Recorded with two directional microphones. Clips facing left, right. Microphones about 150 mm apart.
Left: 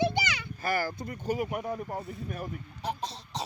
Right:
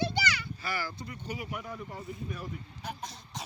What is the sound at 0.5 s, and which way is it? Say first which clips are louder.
Speech: left 6 dB; 50° left (ahead or behind).